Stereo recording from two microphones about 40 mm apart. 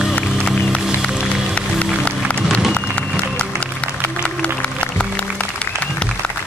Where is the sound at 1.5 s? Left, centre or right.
Left.